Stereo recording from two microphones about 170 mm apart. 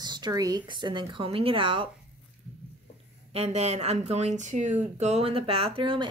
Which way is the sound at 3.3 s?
40° right (ahead or behind).